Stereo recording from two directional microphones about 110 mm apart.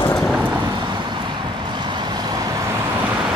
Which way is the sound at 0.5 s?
40° right (ahead or behind).